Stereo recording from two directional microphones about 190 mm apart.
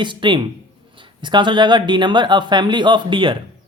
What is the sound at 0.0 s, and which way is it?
Speech, 25° right (ahead or behind).